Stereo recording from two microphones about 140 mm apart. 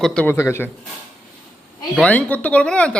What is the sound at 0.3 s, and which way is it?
Speech, 20° left (ahead or behind).